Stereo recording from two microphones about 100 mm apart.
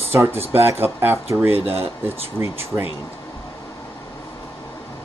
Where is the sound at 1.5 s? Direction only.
80° right.